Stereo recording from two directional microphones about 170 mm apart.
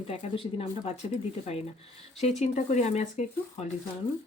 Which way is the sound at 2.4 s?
40° left (ahead or behind).